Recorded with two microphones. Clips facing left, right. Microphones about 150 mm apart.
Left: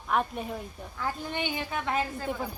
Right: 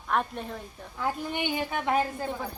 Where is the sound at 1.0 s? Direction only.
15° right (ahead or behind).